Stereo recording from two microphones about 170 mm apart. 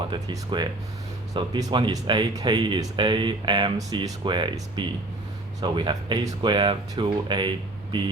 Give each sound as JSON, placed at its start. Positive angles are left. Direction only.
{"t": 0.1, "sound": "speech", "side_deg": -25}